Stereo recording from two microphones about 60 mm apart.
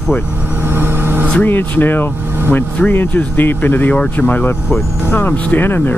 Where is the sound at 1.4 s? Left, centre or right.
Left.